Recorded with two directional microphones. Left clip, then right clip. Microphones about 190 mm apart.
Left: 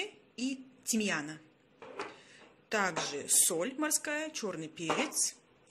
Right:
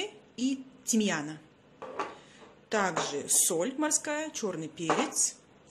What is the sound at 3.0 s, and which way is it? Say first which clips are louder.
Speech: right 3 dB; centre (ahead or behind).